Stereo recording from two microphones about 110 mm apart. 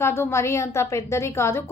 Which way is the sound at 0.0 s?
20° left (ahead or behind).